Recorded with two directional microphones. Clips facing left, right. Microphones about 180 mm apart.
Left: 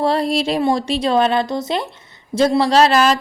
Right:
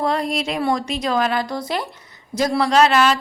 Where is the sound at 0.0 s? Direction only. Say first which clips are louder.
Left 4 dB; 30° left (ahead or behind).